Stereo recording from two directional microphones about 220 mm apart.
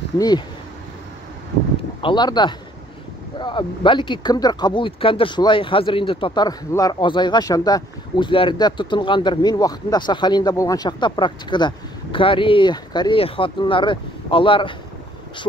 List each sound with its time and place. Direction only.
2.0 s speech: 20° left (ahead or behind)